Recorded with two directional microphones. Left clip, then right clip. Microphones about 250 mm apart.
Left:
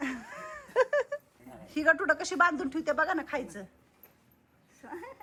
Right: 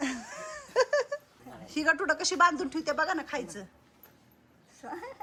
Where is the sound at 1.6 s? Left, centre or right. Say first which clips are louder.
Left 1 dB; centre.